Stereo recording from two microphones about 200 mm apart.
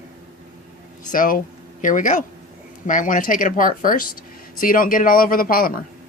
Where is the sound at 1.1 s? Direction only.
45° left (ahead or behind).